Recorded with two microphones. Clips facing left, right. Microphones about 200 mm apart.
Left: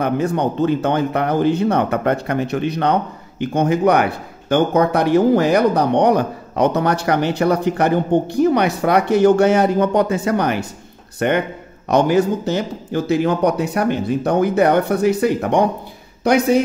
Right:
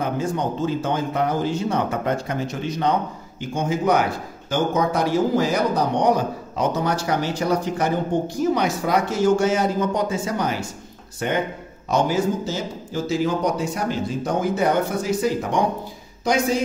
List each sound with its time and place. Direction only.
0.0 s speech: 65° left (ahead or behind)